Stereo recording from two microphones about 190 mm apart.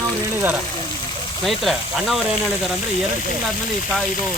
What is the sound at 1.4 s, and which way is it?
Speech, centre (ahead or behind).